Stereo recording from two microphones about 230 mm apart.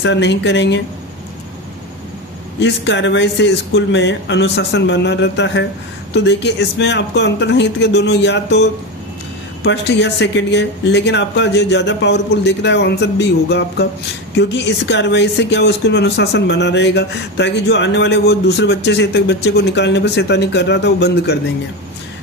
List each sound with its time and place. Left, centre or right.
0.0 s speech: left
2.6 s speech: left
9.6 s speech: left